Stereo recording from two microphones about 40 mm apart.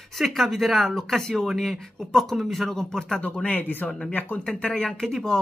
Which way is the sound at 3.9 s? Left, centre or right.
Left.